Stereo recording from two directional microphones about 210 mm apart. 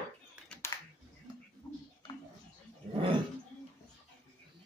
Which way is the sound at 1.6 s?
20° left (ahead or behind).